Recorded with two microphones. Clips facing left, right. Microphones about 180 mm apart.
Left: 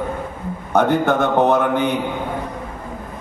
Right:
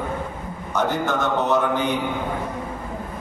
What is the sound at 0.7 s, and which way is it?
A man's voice, 60° left (ahead or behind).